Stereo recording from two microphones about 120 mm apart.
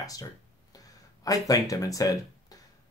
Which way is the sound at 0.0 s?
30° left (ahead or behind).